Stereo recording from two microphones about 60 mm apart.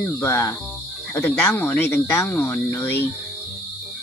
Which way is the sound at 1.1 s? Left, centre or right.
Left.